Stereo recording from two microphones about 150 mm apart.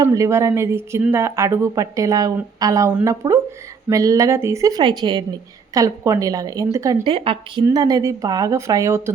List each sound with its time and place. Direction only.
0.0 s speech: 20° right (ahead or behind)
7.0 s speech: 35° right (ahead or behind)
7.6 s speech: 25° right (ahead or behind)